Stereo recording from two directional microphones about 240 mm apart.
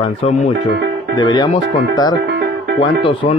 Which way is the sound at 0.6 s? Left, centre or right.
Right.